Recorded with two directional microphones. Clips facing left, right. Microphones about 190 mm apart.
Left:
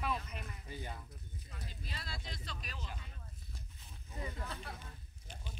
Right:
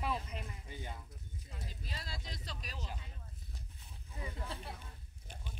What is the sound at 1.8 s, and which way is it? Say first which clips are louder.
Speech: left 1 dB; 40° right (ahead or behind).